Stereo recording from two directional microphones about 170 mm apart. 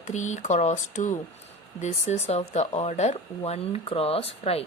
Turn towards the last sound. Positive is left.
turn(degrees=35)  # may be behind; listen again after turning